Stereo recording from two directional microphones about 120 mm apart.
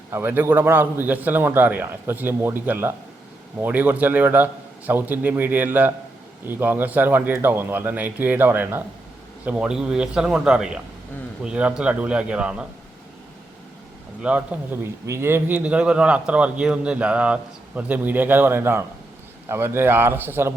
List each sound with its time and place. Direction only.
0.1 s speech: 20° right (ahead or behind)
14.2 s a man's voice: 10° right (ahead or behind)